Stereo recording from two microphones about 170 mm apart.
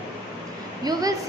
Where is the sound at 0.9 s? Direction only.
20° right (ahead or behind).